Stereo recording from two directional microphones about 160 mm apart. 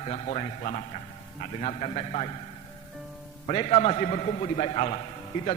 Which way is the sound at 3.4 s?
40° left (ahead or behind).